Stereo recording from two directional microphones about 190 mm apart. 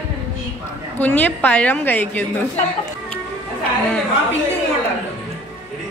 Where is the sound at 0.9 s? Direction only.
10° left (ahead or behind).